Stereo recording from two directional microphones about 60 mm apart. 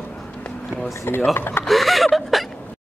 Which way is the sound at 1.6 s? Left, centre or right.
Centre.